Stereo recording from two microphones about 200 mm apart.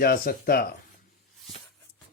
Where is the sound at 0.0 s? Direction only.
50° left (ahead or behind).